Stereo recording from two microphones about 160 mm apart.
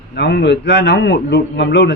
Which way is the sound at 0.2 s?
90° left.